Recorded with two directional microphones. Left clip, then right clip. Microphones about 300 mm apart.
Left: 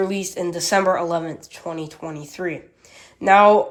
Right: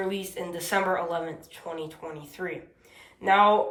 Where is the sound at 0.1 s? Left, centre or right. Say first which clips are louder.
Left 8 dB; centre.